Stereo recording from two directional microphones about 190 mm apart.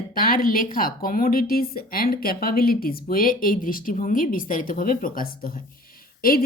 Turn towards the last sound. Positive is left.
turn(degrees=50)  # may be behind; listen again after turning